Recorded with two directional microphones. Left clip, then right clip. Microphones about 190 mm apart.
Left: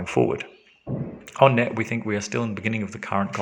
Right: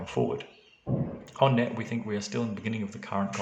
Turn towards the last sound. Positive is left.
turn(degrees=30)  # may be behind; listen again after turning